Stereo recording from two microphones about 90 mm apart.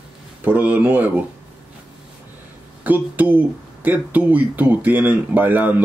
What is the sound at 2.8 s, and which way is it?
Speech, 20° right (ahead or behind).